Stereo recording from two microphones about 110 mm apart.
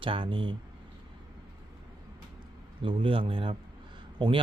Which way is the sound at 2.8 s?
50° right (ahead or behind).